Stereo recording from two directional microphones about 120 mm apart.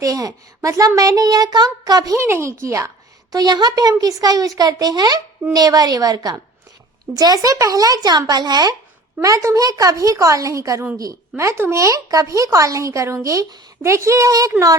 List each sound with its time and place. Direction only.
0.0 s a child's voice: 30° right (ahead or behind)